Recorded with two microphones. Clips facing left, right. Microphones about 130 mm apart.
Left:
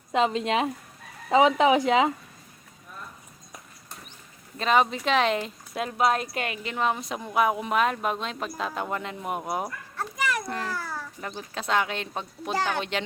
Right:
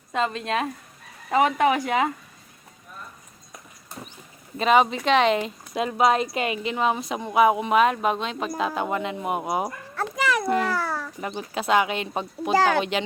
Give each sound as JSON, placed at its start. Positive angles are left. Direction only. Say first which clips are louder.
{"t": 0.1, "sound": "a woman's voice", "louder": "left 2 dB", "side_deg": 15}
{"t": 4.5, "sound": "speech", "louder": "right 4 dB", "side_deg": -5}
{"t": 9.9, "sound": "a sound", "louder": "right 5 dB", "side_deg": -90}
{"t": 10.6, "sound": "babbling", "louder": "right 7 dB", "side_deg": -80}
{"t": 11.2, "sound": "speech", "louder": "right 5 dB", "side_deg": -10}
{"t": 12.5, "sound": "speech", "louder": "right 7 dB", "side_deg": -90}